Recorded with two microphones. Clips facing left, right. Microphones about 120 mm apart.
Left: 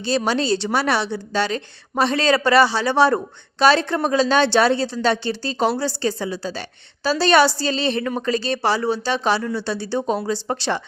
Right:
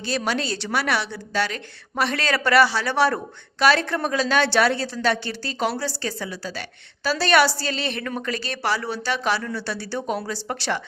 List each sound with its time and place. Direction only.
0.0 s a woman's voice: 25° left (ahead or behind)